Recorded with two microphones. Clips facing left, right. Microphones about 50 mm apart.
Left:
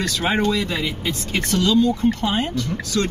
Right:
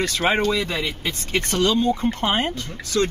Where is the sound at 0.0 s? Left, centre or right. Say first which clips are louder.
Right 1 dB; right.